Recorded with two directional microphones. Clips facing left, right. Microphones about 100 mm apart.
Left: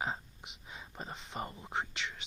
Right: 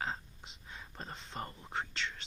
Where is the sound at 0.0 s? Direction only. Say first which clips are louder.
Left 2 dB; 15° left (ahead or behind).